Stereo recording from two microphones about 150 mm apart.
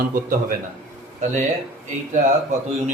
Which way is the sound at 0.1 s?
65° right (ahead or behind).